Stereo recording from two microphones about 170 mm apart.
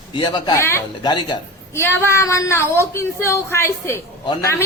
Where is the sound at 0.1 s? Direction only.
25° left (ahead or behind).